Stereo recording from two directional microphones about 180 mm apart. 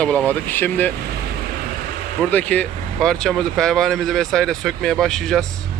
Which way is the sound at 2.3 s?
10° left (ahead or behind).